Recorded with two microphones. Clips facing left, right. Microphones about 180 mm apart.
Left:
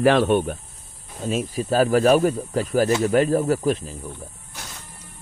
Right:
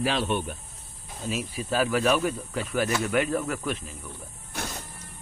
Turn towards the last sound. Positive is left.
turn(degrees=35)  # may be behind; listen again after turning